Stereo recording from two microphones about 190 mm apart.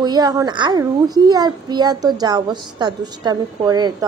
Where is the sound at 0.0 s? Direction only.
20° right (ahead or behind).